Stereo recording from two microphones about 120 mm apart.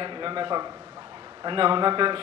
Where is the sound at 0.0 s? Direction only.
45° right (ahead or behind).